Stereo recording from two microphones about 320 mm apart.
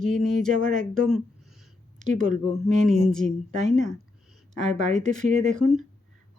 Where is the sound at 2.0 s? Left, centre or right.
Right.